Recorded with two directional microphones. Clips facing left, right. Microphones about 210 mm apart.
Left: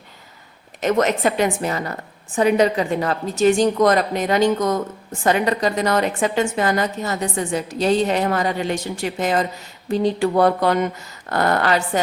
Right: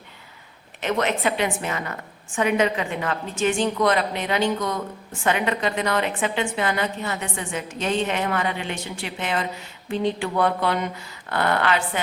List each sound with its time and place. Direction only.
0.8 s a woman's voice: 40° left (ahead or behind)